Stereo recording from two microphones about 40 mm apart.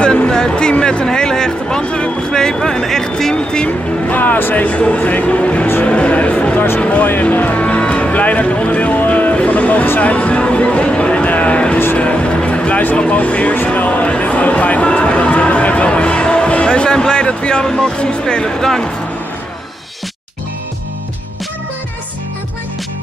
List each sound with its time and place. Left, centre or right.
0.0 s a sound: left
0.3 s speech: centre
3.6 s speech: left
4.6 s a man's voice: left
7.1 s speech: left
7.5 s music: left
9.9 s speech: left
11.2 s a sound: left
12.0 s music: left
13.1 s a man's voice: left
14.0 s speech: left